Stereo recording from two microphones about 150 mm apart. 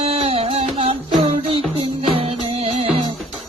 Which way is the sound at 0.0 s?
40° right (ahead or behind).